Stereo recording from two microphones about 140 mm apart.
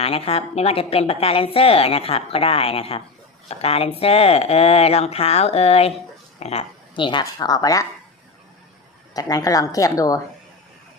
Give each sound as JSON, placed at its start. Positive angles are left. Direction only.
{"t": 0.0, "sound": "a woman's voice", "side_deg": 45}
{"t": 9.1, "sound": "a woman's voice", "side_deg": 25}